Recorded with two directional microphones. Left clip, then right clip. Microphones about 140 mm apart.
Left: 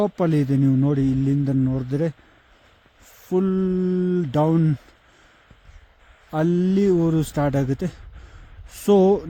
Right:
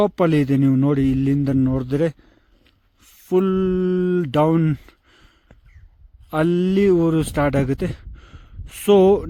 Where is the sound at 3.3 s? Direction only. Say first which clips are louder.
Right 4 dB; 25° right (ahead or behind).